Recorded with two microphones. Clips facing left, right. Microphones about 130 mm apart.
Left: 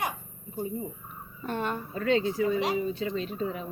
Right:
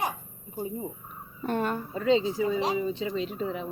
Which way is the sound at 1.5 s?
40° right (ahead or behind).